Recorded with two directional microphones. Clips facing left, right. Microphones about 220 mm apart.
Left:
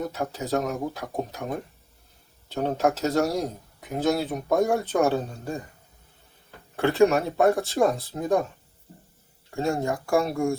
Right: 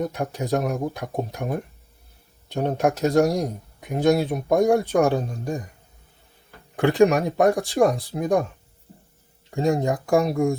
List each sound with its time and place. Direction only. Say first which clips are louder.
0.0 s speech: right 3 dB; 15° right (ahead or behind)
6.7 s speech: right 2 dB; 15° right (ahead or behind)
9.5 s speech: right 4 dB; 15° right (ahead or behind)